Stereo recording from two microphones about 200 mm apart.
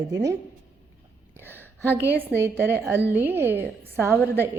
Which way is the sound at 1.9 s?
10° right (ahead or behind).